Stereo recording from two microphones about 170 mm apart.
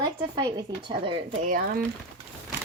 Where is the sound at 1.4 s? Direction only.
55° right (ahead or behind).